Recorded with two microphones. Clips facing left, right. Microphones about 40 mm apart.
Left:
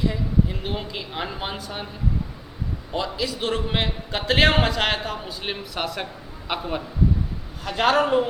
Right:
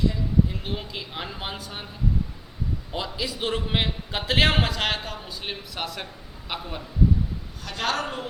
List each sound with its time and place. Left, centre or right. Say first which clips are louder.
0.0 s a sound: left 1 dB; centre
0.5 s a man's voice: left 3 dB; centre
2.9 s a man's voice: left 5 dB; centre
6.5 s a man's voice: left 6 dB; left